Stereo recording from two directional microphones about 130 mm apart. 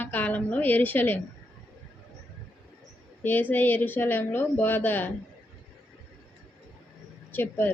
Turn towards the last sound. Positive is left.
turn(degrees=15)  # may be behind; listen again after turning